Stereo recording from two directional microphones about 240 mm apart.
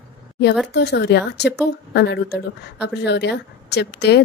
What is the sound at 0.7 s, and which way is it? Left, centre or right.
A woman's voice, left.